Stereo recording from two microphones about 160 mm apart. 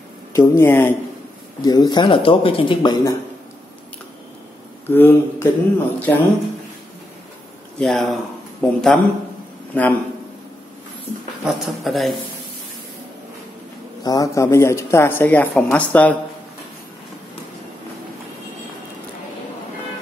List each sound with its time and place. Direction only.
0.3 s speech: 20° left (ahead or behind)
1.6 s speech: 25° left (ahead or behind)
4.8 s speech: 15° left (ahead or behind)
7.8 s speech: centre (ahead or behind)
11.4 s speech: centre (ahead or behind)
14.0 s speech: 20° left (ahead or behind)